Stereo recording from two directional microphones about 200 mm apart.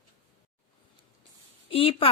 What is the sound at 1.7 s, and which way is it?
Speech, 25° left (ahead or behind).